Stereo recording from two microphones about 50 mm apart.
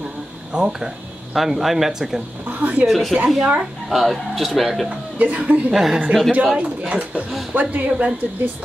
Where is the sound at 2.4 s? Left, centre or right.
Right.